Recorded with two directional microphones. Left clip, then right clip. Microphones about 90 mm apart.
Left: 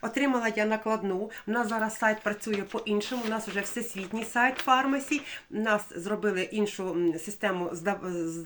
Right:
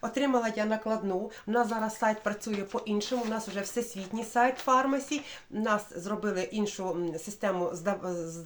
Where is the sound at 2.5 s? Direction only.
35° right (ahead or behind).